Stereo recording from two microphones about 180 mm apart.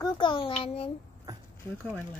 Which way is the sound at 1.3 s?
20° right (ahead or behind).